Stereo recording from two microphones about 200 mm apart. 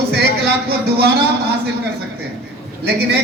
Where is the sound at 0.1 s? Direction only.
55° right (ahead or behind).